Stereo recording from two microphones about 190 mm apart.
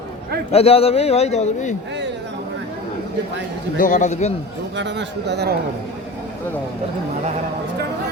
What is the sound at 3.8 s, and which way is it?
Speech, 40° left (ahead or behind).